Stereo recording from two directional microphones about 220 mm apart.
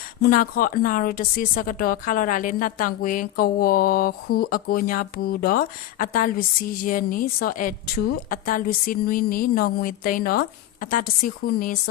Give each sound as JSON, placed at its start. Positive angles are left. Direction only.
{"t": 0.2, "sound": "a woman's voice", "side_deg": 40}